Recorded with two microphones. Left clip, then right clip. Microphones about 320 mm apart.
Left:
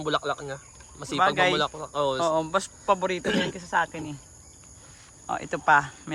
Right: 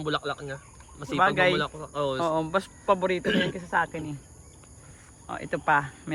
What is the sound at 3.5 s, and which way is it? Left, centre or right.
Speech, centre.